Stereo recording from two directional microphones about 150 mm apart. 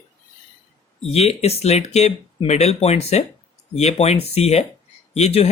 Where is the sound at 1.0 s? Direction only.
45° left (ahead or behind).